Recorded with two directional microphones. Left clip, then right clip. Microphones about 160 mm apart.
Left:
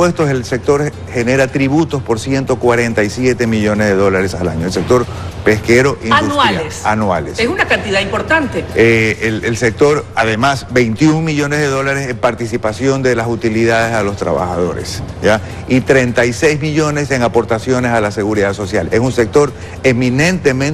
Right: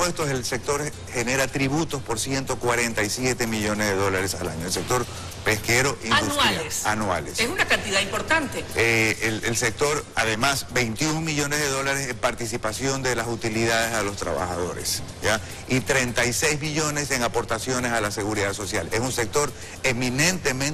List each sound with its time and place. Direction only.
0.0 s speech: 10° left (ahead or behind)
6.8 s speech: 25° left (ahead or behind)
7.3 s speech: 10° left (ahead or behind)
14.3 s speech: 30° left (ahead or behind)
15.2 s speech: 10° left (ahead or behind)